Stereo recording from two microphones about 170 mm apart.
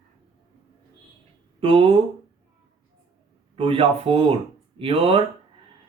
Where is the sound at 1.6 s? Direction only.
35° right (ahead or behind).